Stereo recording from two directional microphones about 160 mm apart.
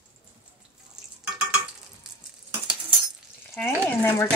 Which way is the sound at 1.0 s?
Centre (ahead or behind).